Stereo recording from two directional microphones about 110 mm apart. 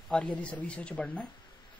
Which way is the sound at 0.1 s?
10° left (ahead or behind).